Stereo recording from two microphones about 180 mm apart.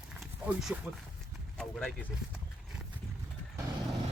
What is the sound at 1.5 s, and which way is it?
Speech, 5° left (ahead or behind).